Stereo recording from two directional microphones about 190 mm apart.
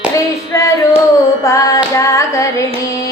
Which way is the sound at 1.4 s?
15° left (ahead or behind).